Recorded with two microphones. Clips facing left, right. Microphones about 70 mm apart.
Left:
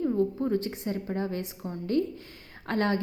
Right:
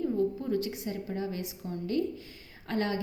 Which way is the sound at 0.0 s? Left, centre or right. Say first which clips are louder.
Left 3 dB; left.